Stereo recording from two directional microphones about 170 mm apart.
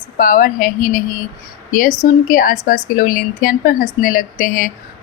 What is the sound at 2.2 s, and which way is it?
A woman's voice, 55° left (ahead or behind).